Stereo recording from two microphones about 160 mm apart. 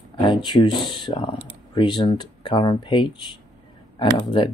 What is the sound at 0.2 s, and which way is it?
Speech, 30° left (ahead or behind).